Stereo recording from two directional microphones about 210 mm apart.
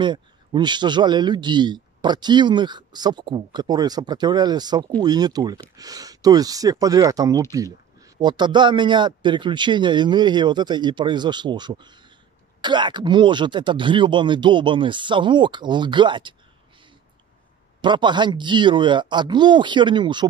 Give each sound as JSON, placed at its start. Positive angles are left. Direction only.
{"t": 0.0, "sound": "a man's voice", "side_deg": -20}
{"t": 17.8, "sound": "a man's voice", "side_deg": -20}